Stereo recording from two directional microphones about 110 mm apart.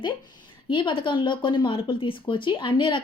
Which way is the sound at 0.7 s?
50° left (ahead or behind).